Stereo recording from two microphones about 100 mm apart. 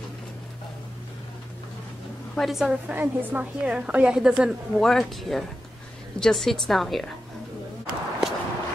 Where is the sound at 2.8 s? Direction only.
20° right (ahead or behind); by 7.1 s centre (ahead or behind).